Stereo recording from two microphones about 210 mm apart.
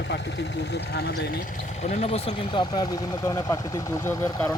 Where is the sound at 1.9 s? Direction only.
30° left (ahead or behind).